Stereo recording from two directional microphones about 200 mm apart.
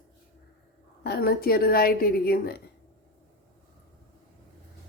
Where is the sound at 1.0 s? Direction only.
50° left (ahead or behind).